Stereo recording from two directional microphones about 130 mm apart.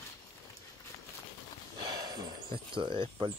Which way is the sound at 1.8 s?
30° right (ahead or behind).